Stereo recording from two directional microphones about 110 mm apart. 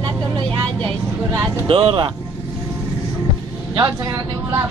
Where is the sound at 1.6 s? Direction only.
55° right (ahead or behind).